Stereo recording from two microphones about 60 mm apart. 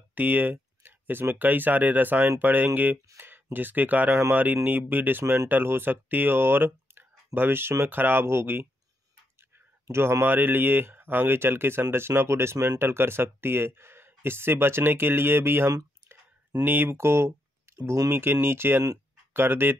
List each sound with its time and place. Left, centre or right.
0.1 s speech: right
3.2 s a sound: right
3.5 s speech: right
9.8 s speech: right
10.2 s speech: right
17.7 s a sound: right
18.1 s speech: right